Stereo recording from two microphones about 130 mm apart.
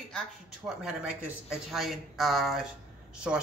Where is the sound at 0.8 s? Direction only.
5° right (ahead or behind).